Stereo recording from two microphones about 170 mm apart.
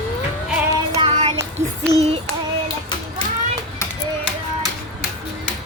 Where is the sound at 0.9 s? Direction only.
35° right (ahead or behind).